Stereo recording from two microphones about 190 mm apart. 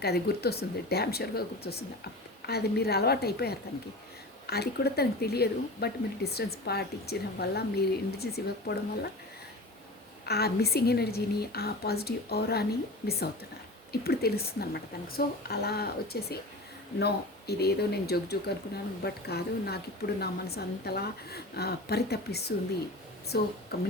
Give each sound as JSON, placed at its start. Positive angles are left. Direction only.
{"t": 0.0, "sound": "speech", "side_deg": 55}
{"t": 10.2, "sound": "speech", "side_deg": 55}
{"t": 14.0, "sound": "speech", "side_deg": 55}